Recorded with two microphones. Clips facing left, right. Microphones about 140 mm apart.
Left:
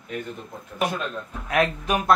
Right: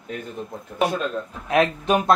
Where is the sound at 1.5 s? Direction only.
25° right (ahead or behind).